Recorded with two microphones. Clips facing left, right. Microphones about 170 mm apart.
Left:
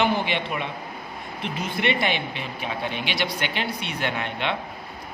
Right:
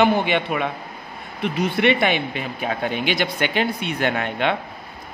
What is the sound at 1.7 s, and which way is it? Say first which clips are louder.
Speech: right 5 dB; 60° right (ahead or behind).